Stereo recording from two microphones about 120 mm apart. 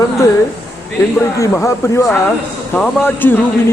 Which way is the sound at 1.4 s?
25° left (ahead or behind).